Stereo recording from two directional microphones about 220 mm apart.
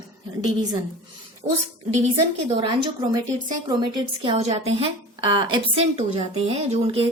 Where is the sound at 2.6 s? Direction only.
20° right (ahead or behind).